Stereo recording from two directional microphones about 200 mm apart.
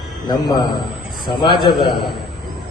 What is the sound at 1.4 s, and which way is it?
Speech, 25° left (ahead or behind).